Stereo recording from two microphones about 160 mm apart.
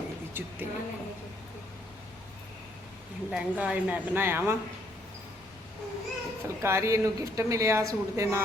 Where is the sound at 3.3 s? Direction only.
5° right (ahead or behind).